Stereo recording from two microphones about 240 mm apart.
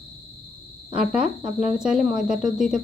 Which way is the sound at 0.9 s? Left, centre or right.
Centre.